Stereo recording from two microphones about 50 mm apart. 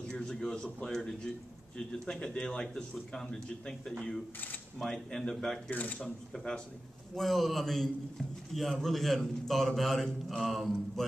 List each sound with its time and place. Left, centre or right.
0.1 s a man's voice: centre
4.7 s a man's voice: centre
5.7 s speech: left
5.9 s a man's voice: centre
7.2 s a man's voice: centre